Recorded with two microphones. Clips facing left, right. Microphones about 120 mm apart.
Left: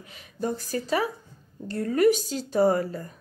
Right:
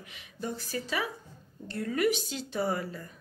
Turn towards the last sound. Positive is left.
turn(degrees=40)  # may be behind; listen again after turning